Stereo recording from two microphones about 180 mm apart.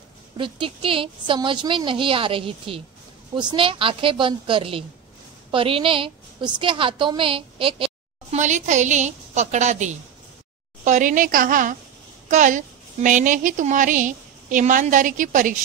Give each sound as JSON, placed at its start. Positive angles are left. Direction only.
{"t": 0.4, "sound": "a woman's voice", "side_deg": -30}
{"t": 8.4, "sound": "a woman's voice", "side_deg": -40}